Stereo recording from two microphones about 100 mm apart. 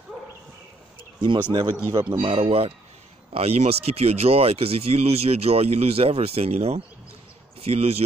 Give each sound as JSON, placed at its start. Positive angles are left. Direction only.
{"t": 1.5, "sound": "speech", "side_deg": -55}
{"t": 3.3, "sound": "speech", "side_deg": -90}